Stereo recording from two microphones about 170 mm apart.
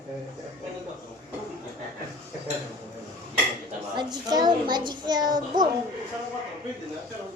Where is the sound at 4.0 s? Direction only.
25° right (ahead or behind).